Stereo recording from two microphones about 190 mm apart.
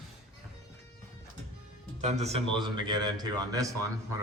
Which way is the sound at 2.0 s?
35° right (ahead or behind).